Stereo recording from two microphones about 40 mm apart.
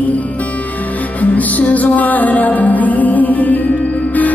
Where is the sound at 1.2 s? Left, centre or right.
Left.